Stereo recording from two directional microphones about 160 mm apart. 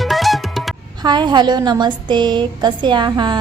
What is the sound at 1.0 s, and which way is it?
Speech, 25° right (ahead or behind).